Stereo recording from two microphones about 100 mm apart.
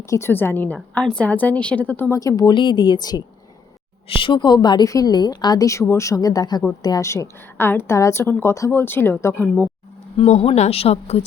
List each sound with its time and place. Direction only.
0.0 s a woman's voice: 30° left (ahead or behind)
2.1 s speech: 35° left (ahead or behind)
2.5 s a woman's voice: 50° left (ahead or behind)
4.1 s a woman's voice: 60° left (ahead or behind); by 7.1 s 40° left (ahead or behind)
7.1 s a woman's voice: 25° left (ahead or behind)
10.2 s speech: 90° left